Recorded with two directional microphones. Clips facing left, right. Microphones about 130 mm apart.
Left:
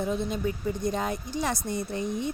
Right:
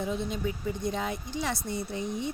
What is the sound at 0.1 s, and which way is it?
Speech, 45° left (ahead or behind).